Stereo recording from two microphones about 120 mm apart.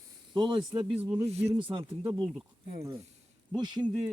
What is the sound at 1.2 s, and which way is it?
Speech, 60° right (ahead or behind).